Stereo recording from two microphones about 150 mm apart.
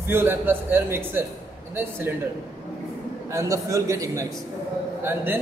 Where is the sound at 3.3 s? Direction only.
20° right (ahead or behind).